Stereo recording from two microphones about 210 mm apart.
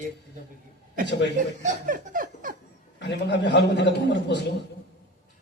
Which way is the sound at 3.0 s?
55° left (ahead or behind).